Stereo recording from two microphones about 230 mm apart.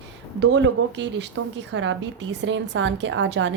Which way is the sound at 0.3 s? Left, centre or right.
Right.